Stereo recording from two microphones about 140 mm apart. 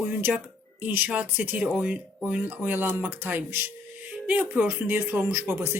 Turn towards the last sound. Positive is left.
turn(degrees=-20)  # may be behind; listen again after turning